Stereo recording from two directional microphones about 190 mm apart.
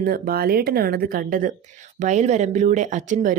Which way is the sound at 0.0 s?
50° right (ahead or behind).